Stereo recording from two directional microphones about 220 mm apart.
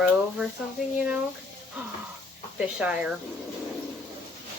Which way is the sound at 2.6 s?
5° right (ahead or behind).